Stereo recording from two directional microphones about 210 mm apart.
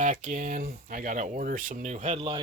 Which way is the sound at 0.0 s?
35° right (ahead or behind).